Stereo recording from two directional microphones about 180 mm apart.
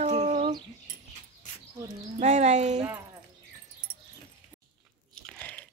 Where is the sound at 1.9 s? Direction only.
40° right (ahead or behind).